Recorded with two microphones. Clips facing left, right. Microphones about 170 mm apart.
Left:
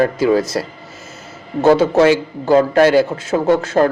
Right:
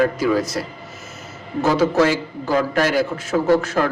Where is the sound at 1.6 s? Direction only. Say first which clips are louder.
Left 6 dB; 25° left (ahead or behind).